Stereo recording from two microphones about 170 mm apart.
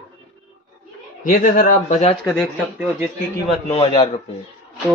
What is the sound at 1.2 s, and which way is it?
Speech, 55° left (ahead or behind).